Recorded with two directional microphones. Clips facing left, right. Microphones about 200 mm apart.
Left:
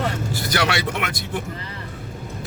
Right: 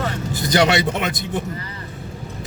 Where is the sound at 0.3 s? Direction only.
20° right (ahead or behind).